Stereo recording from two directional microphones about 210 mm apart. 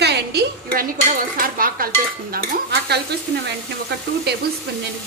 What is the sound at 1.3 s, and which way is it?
Stir, 40° right (ahead or behind).